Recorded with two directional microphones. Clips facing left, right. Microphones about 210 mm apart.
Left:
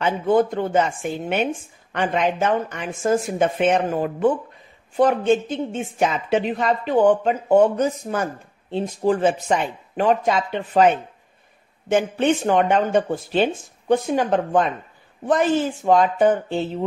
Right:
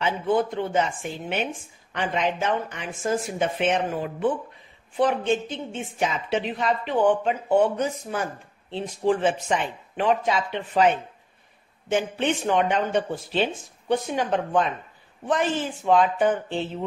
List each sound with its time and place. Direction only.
0.0 s a woman's voice: 45° left (ahead or behind)
11.9 s a woman's voice: 45° left (ahead or behind)